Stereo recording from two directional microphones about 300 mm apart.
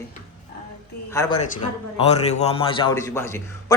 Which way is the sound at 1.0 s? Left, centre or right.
Centre.